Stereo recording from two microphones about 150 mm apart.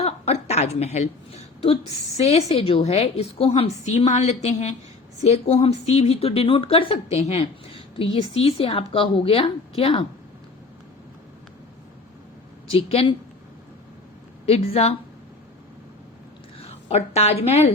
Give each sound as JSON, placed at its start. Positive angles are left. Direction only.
{"t": 0.0, "sound": "a sound", "side_deg": 45}
{"t": 1.6, "sound": "a woman's voice", "side_deg": 40}
{"t": 12.7, "sound": "a woman's voice", "side_deg": 40}
{"t": 14.4, "sound": "a woman's voice", "side_deg": 40}
{"t": 16.6, "sound": "a sound", "side_deg": 40}
{"t": 17.4, "sound": "a woman's voice", "side_deg": 45}